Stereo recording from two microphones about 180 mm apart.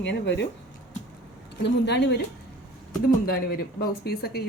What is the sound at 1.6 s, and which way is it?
Speech, 70° left (ahead or behind).